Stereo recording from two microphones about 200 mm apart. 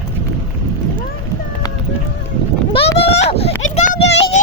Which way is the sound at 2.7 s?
30° left (ahead or behind).